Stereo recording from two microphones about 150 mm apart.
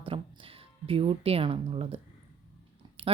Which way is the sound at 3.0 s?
35° right (ahead or behind).